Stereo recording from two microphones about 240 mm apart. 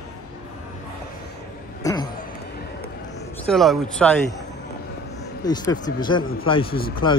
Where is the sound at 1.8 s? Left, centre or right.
Centre.